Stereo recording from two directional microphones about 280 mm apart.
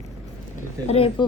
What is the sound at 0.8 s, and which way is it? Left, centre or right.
Speech, centre.